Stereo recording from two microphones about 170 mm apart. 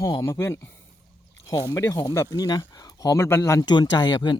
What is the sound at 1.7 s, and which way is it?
Speech, 20° left (ahead or behind).